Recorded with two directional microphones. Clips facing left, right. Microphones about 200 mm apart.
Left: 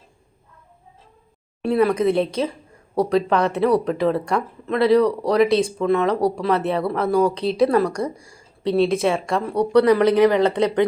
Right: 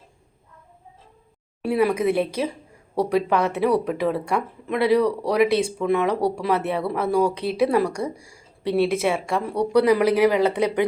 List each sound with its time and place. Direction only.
1.6 s a woman's voice: 10° right (ahead or behind)